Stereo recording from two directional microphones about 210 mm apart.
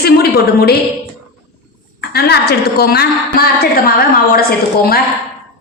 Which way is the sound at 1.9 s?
50° left (ahead or behind).